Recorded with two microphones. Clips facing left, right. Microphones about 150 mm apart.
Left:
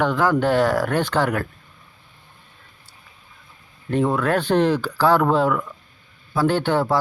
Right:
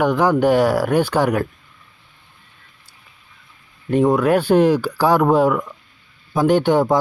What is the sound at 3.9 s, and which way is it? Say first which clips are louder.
Speech: right 5 dB; 15° right (ahead or behind).